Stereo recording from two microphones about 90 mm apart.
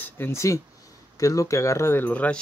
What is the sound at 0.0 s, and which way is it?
Speech, 25° left (ahead or behind).